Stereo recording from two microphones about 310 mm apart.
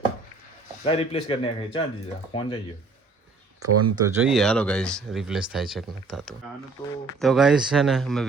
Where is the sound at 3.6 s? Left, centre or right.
Right.